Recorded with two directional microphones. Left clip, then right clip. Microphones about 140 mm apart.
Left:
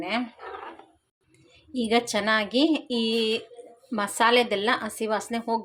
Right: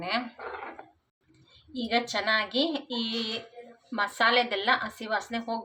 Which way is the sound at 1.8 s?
70° left (ahead or behind).